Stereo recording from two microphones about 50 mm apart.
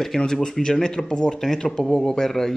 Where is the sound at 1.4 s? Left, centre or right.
Centre.